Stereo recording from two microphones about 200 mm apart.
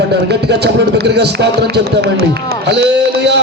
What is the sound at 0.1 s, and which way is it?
Speech, 55° right (ahead or behind).